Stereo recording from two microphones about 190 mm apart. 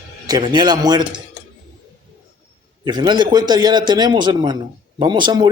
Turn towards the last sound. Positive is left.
turn(degrees=-20)  # may be behind; listen again after turning